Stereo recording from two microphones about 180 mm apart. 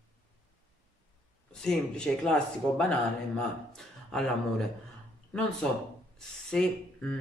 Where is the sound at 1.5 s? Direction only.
5° left (ahead or behind).